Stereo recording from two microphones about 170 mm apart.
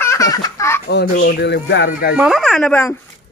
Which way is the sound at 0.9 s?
80° left.